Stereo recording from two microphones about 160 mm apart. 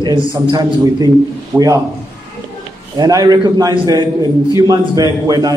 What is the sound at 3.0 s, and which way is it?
A man's voice, 25° right (ahead or behind).